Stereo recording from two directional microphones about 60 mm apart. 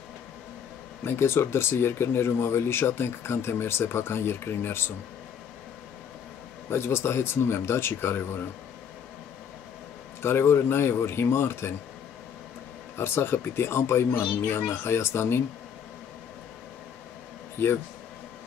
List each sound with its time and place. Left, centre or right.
1.0 s speech: left
6.7 s speech: left
10.2 s speech: left
12.9 s speech: left
17.6 s speech: left